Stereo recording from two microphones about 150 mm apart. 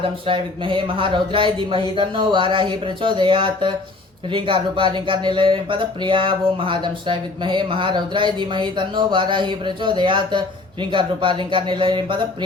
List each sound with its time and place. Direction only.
0.3 s speech: 35° right (ahead or behind)